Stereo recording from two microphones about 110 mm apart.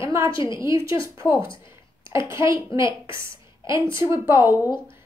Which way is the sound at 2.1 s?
25° right (ahead or behind).